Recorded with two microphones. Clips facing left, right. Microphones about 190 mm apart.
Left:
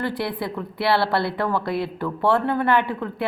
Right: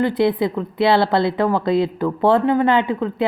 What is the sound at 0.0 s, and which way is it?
A woman's voice, 20° right (ahead or behind).